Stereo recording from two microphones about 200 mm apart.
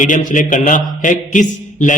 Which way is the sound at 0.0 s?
40° left (ahead or behind).